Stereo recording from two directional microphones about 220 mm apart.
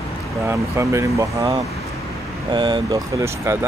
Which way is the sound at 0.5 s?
10° right (ahead or behind).